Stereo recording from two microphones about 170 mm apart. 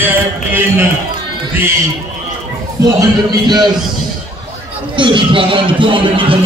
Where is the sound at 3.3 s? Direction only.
25° right (ahead or behind).